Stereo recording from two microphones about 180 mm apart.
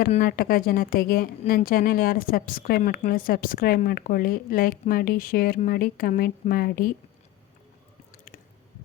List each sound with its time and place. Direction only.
0.1 s a woman's voice: 50° left (ahead or behind)
8.1 s squish: 50° left (ahead or behind)